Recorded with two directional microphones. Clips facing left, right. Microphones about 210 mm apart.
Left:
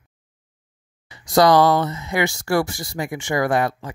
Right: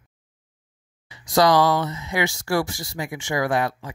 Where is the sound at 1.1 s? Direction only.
50° left (ahead or behind).